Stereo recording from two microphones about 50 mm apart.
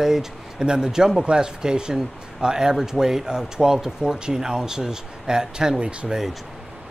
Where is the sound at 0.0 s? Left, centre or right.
Centre.